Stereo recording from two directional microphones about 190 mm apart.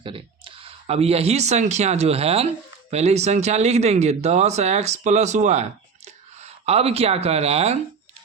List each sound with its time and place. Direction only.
0.0 s speech: 30° right (ahead or behind)